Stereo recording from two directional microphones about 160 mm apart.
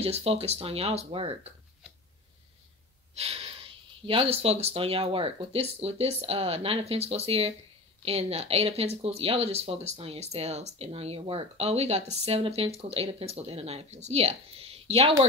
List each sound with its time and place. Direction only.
0.0 s speech: 40° right (ahead or behind)
3.2 s speech: 40° right (ahead or behind)